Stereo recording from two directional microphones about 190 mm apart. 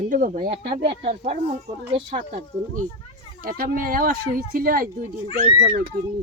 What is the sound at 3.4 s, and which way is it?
Speech, 50° right (ahead or behind).